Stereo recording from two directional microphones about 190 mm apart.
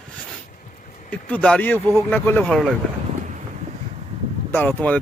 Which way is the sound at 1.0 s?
5° left (ahead or behind).